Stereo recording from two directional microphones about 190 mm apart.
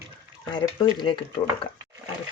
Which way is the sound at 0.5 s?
25° left (ahead or behind).